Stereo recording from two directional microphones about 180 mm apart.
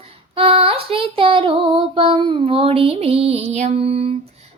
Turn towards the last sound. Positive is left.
turn(degrees=-35)  # may be behind; listen again after turning